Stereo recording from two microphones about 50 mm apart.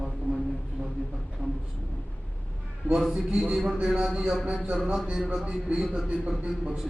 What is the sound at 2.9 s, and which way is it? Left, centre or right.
A man's voice, centre.